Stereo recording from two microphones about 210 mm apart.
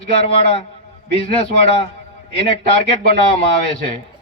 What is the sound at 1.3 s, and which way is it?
Speech, 30° left (ahead or behind).